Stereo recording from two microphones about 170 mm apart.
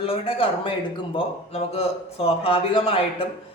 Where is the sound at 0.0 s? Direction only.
35° left (ahead or behind).